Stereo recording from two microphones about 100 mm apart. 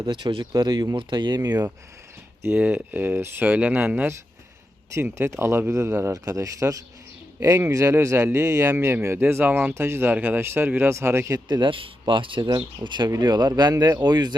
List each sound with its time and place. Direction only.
0.0 s speech: 50° right (ahead or behind)
0.5 s speech: 45° right (ahead or behind)
2.6 s speech: 15° right (ahead or behind)
5.1 s a man's voice: 30° right (ahead or behind)
11.4 s speech: 50° right (ahead or behind)